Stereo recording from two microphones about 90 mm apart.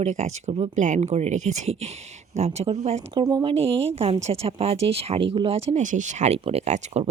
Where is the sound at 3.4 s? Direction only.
90° right.